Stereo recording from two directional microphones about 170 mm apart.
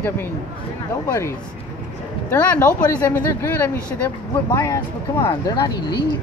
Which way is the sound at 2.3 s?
10° left (ahead or behind).